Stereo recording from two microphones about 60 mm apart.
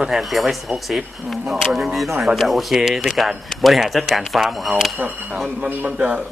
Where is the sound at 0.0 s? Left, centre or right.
Centre.